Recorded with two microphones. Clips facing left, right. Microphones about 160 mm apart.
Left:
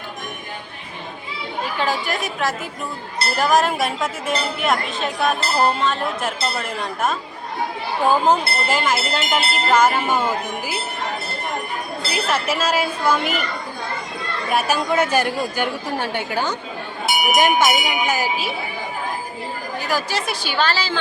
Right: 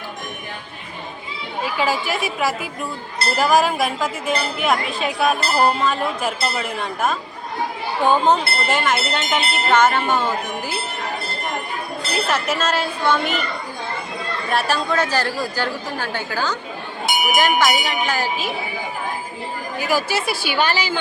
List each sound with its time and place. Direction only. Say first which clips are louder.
1.6 s a woman's voice: right 2 dB; 5° right (ahead or behind)
12.1 s a woman's voice: even; 5° left (ahead or behind)
14.5 s a woman's voice: left 1 dB; 15° left (ahead or behind)
19.8 s a woman's voice: right 3 dB; 10° right (ahead or behind)